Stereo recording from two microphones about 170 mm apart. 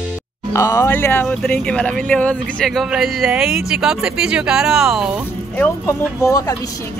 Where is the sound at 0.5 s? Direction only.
20° left (ahead or behind).